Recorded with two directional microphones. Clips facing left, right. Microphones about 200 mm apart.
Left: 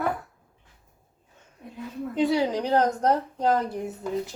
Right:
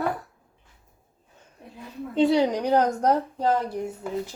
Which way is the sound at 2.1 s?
25° right (ahead or behind).